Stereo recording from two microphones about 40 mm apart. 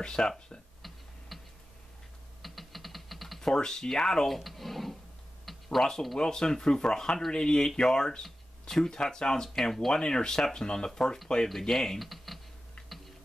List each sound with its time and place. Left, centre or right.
0.0 s speech: centre
1.3 s tick-tock: centre
2.4 s typing: centre
3.3 s speech: centre
4.3 s speech: centre
5.4 s a sound: centre
6.1 s speech: centre
9.9 s speech: centre
12.0 s typing: centre